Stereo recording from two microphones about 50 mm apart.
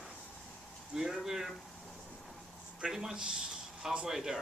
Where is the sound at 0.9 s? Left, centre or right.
Centre.